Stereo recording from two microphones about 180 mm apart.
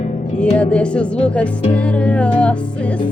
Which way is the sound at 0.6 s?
5° left (ahead or behind).